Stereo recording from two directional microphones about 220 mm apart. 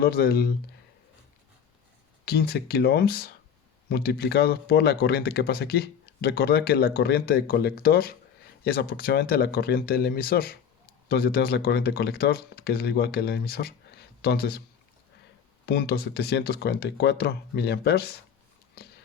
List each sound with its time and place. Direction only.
0.0 s speech: 45° left (ahead or behind)
2.2 s speech: 45° left (ahead or behind)
15.6 s speech: 45° left (ahead or behind)